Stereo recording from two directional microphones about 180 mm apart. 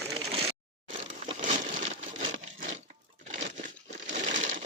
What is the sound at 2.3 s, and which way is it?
Wood, 45° right (ahead or behind).